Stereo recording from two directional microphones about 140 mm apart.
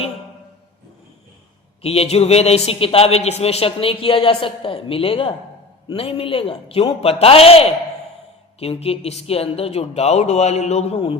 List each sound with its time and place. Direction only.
1.8 s speech: 45° left (ahead or behind)